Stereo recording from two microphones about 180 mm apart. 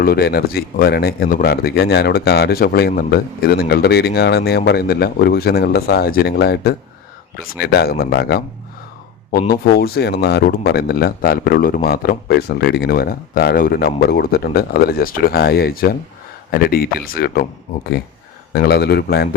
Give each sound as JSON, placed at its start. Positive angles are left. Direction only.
{"t": 0.0, "sound": "speech", "side_deg": 60}
{"t": 9.5, "sound": "speech", "side_deg": 60}
{"t": 18.5, "sound": "speech", "side_deg": 65}